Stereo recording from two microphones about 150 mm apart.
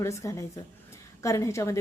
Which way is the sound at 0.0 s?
20° left (ahead or behind).